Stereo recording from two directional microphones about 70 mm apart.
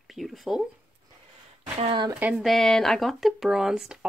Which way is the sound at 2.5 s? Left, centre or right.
Centre.